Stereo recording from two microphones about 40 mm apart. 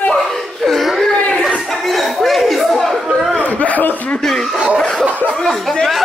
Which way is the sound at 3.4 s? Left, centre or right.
Left.